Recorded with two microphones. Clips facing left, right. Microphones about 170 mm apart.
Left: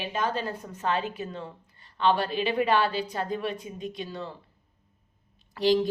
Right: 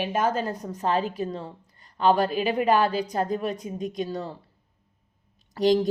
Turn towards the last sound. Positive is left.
turn(degrees=-40)  # may be behind; listen again after turning